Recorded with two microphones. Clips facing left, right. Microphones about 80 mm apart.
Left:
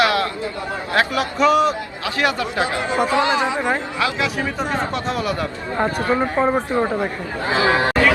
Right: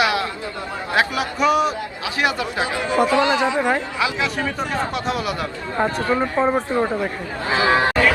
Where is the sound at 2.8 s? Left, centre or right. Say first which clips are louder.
Right 3 dB; left.